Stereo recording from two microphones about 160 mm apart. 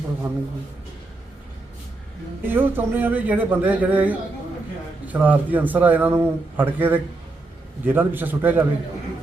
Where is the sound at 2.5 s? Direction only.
15° right (ahead or behind).